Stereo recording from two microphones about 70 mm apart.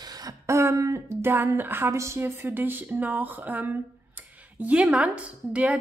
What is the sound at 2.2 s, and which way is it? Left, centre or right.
A woman's voice, right.